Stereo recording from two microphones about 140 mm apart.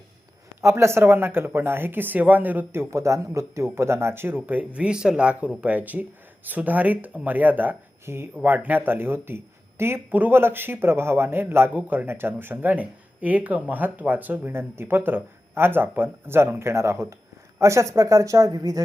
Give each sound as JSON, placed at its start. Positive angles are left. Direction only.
{"t": 0.6, "sound": "speech", "side_deg": -20}